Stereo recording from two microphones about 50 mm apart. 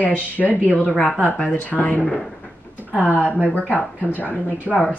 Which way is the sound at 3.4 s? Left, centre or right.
Left.